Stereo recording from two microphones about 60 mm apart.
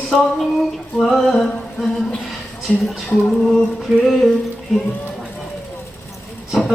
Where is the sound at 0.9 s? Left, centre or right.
Centre.